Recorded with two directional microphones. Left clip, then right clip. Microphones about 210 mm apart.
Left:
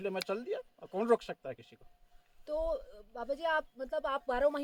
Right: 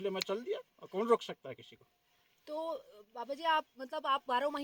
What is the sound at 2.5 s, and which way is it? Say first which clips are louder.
Speech: left 5 dB; 50° left (ahead or behind).